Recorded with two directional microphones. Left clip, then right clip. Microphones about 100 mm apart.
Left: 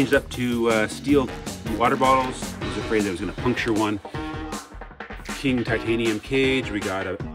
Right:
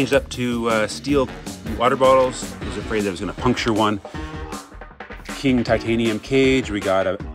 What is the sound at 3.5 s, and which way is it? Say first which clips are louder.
Speech: right 3 dB; 60° right (ahead or behind).